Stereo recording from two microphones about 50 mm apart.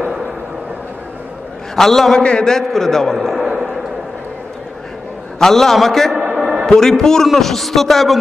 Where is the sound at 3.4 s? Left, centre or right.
Centre.